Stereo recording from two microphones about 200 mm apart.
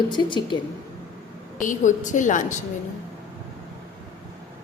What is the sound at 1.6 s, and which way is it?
Speech, 40° left (ahead or behind).